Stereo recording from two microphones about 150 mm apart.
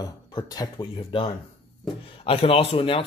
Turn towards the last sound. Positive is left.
turn(degrees=35)  # may be behind; listen again after turning